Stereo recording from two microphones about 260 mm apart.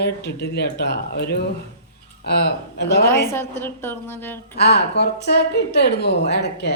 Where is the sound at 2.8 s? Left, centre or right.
Left.